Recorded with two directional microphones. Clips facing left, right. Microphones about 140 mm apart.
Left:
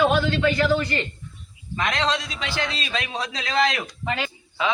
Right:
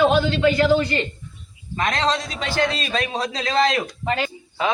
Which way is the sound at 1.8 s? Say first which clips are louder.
Right 2 dB; 40° right (ahead or behind).